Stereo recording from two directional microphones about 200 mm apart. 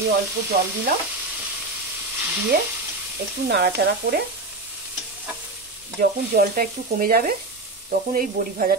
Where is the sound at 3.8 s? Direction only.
55° right (ahead or behind).